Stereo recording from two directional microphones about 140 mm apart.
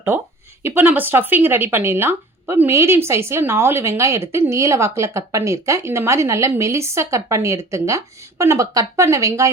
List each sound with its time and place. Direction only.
0.1 s speech: 15° right (ahead or behind)